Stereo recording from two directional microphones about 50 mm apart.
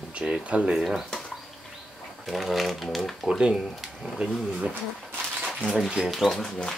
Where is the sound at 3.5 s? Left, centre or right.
Centre.